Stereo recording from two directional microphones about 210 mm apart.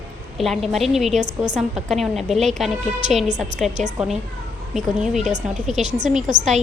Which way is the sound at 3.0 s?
35° right (ahead or behind).